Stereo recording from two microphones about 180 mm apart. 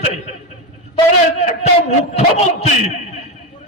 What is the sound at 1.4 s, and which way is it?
A man's voice, 35° left (ahead or behind).